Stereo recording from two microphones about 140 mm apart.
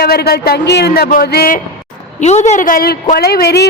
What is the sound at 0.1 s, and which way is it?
A woman's voice, 90° left.